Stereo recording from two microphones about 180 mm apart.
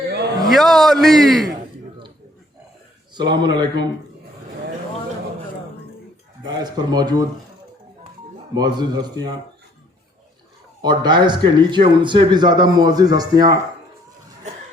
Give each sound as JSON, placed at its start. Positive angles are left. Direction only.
{"t": 0.4, "sound": "a man's voice", "side_deg": 0}
{"t": 3.2, "sound": "speech", "side_deg": -25}
{"t": 6.6, "sound": "speech", "side_deg": -20}
{"t": 8.5, "sound": "speech", "side_deg": -20}
{"t": 10.8, "sound": "speech", "side_deg": -25}